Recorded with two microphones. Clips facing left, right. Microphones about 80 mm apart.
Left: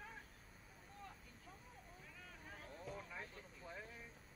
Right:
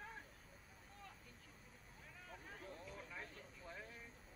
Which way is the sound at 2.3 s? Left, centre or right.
Centre.